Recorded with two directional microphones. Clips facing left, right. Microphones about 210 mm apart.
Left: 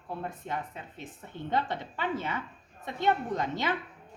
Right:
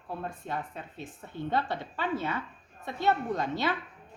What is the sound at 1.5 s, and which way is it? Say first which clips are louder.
Speech: even; 20° left (ahead or behind).